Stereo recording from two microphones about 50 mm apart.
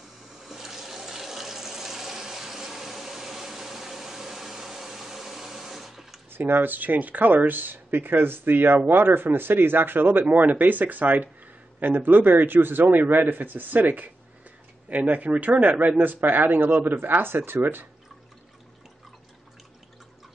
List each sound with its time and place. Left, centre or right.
0.4 s water: centre
6.3 s speech: right
16.0 s speech: right